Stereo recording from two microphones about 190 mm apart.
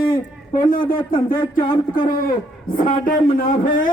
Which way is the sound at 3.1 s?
45° left (ahead or behind).